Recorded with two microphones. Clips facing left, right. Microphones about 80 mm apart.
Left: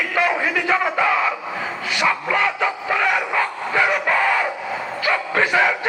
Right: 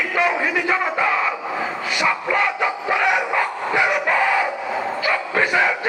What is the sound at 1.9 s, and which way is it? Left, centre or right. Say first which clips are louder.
Bow-wow: left 1 dB; centre.